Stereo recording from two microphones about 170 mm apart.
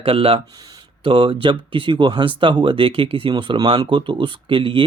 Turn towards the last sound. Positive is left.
turn(degrees=-30)  # may be behind; listen again after turning